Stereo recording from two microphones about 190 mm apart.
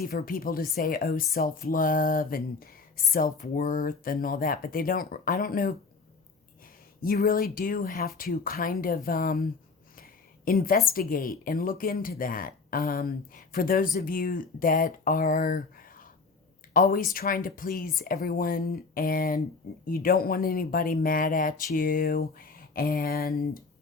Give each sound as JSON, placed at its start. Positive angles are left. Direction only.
{"t": 0.0, "sound": "a woman's voice", "side_deg": 50}
{"t": 7.0, "sound": "a woman's voice", "side_deg": 50}